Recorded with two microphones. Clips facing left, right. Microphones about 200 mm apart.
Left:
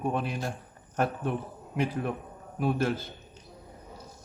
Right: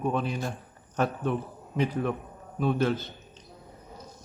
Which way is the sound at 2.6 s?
5° left (ahead or behind).